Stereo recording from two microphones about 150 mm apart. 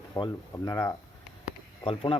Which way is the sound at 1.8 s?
35° left (ahead or behind).